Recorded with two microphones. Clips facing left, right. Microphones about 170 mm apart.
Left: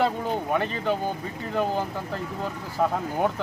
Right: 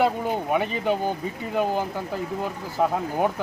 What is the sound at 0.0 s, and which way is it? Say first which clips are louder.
Speech: right 2 dB; 10° right (ahead or behind).